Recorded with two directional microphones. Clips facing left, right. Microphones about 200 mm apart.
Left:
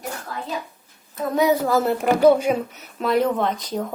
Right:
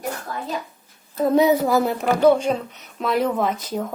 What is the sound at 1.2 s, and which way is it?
Speech, 25° right (ahead or behind).